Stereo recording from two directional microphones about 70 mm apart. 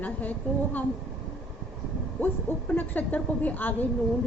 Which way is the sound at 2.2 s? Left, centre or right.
Left.